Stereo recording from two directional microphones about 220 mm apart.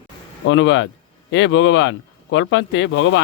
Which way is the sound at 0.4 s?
60° left (ahead or behind).